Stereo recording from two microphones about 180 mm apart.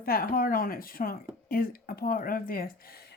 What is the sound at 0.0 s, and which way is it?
Speech, 55° left (ahead or behind).